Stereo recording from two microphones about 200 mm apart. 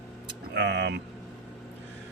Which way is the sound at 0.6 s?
60° right (ahead or behind).